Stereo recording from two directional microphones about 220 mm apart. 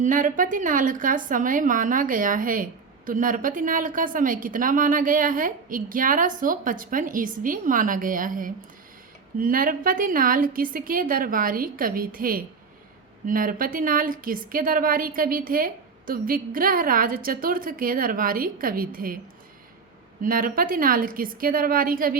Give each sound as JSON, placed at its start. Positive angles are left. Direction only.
{"t": 0.0, "sound": "speech", "side_deg": -35}
{"t": 20.2, "sound": "speech", "side_deg": -40}